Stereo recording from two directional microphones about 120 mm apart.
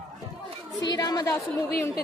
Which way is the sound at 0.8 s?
35° left (ahead or behind).